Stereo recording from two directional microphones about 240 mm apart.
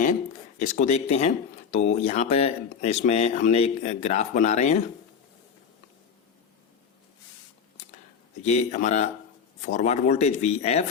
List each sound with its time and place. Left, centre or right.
0.6 s speech: left
8.4 s speech: left